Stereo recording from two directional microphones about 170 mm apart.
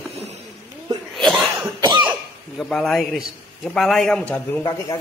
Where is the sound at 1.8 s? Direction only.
25° right (ahead or behind).